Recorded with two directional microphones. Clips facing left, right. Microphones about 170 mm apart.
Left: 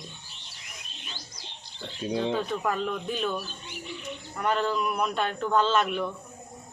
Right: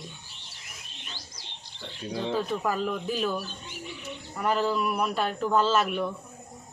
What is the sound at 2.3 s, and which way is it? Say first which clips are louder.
Speech: even; centre (ahead or behind).